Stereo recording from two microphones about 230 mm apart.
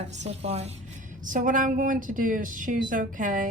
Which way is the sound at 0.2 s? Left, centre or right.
Right.